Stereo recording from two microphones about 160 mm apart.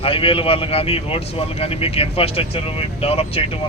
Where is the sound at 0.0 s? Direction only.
35° left (ahead or behind).